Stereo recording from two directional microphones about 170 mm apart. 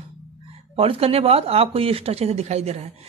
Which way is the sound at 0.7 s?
35° right (ahead or behind).